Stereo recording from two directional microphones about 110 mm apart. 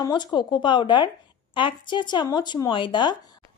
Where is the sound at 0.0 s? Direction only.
40° left (ahead or behind).